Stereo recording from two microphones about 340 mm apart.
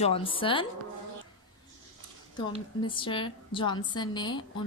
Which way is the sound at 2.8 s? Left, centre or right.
Centre.